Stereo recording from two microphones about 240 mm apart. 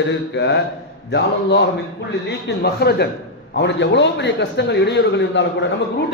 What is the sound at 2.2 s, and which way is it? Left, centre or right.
A man's voice, left.